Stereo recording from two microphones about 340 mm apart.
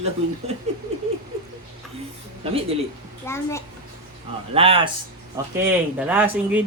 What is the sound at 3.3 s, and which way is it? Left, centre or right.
Speech, centre.